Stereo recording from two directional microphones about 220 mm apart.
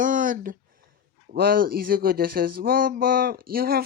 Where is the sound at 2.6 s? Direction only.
40° right (ahead or behind).